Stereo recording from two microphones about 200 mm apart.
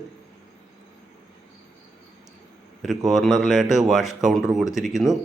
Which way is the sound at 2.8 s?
Centre (ahead or behind).